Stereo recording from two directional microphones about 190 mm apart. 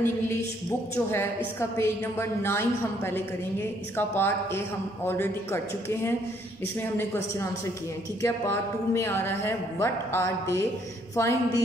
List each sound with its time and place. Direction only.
0.7 s a woman's voice: 15° left (ahead or behind)
7.0 s a woman's voice: 15° left (ahead or behind)